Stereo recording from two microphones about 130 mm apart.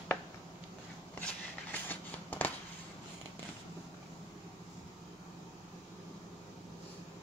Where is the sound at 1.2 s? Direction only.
10° left (ahead or behind).